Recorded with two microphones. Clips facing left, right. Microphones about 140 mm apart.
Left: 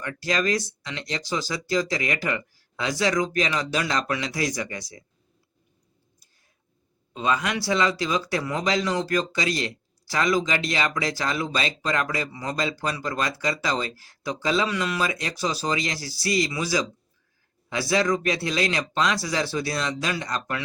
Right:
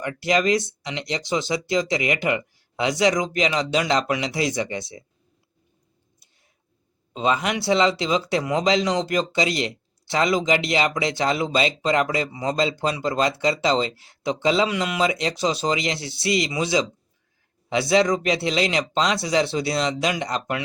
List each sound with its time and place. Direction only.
0.0 s speech: 20° right (ahead or behind)
7.1 s speech: 25° right (ahead or behind)